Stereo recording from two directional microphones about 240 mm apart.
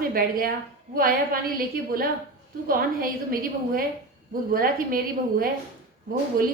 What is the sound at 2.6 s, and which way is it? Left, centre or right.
A woman's voice, right.